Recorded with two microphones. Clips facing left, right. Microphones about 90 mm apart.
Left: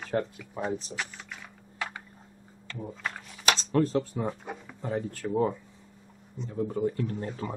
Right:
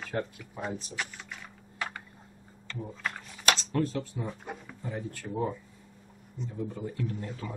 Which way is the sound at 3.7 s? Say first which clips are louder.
Left 5 dB; 40° left (ahead or behind).